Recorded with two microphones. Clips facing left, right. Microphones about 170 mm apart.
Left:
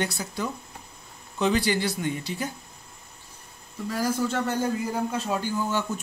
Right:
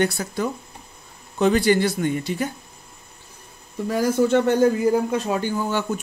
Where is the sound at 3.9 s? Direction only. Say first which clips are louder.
Right 8 dB; 65° right (ahead or behind).